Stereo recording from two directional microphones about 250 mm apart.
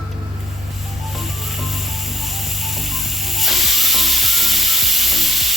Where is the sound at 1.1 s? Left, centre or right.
Centre.